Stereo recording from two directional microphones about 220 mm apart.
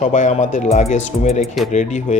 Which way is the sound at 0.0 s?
35° left (ahead or behind).